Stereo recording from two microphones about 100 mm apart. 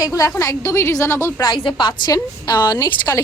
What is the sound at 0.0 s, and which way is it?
A woman's voice, 35° left (ahead or behind).